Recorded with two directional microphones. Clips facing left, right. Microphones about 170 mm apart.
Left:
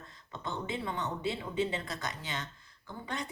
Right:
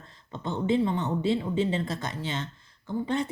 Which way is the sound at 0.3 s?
25° right (ahead or behind).